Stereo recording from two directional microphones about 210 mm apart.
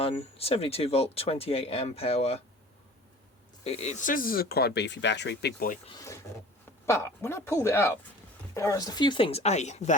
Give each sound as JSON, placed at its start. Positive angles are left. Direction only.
{"t": 0.0, "sound": "speech", "side_deg": 30}
{"t": 3.6, "sound": "speech", "side_deg": 30}
{"t": 5.8, "sound": "speech", "side_deg": 20}